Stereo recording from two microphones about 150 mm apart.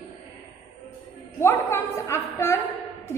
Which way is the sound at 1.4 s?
15° left (ahead or behind).